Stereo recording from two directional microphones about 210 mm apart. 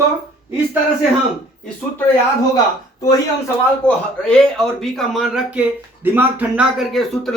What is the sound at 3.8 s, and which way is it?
Speech, 5° left (ahead or behind).